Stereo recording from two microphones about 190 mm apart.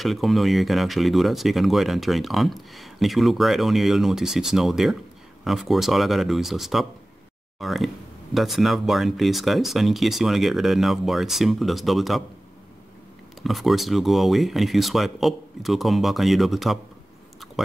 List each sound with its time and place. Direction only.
0.0 s speech: centre (ahead or behind)
13.4 s speech: centre (ahead or behind)